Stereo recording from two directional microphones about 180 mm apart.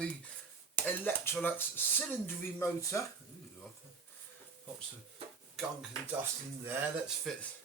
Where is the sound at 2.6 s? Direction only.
15° left (ahead or behind).